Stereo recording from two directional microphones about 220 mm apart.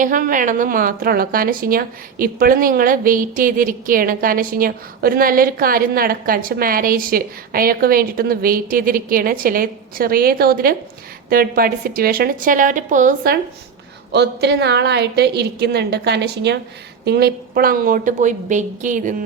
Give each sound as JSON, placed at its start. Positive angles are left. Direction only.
{"t": 0.0, "sound": "a woman's voice", "side_deg": -40}
{"t": 14.1, "sound": "a woman's voice", "side_deg": -50}